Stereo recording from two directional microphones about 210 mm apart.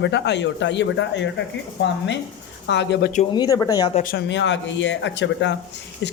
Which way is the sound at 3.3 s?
15° left (ahead or behind).